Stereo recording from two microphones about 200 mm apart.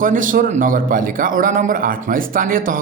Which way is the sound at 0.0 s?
40° right (ahead or behind).